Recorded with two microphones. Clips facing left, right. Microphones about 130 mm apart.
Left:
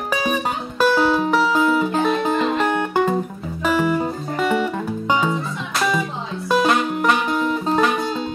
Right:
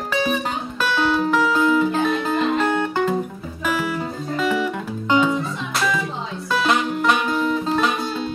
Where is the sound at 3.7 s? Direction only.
45° left (ahead or behind).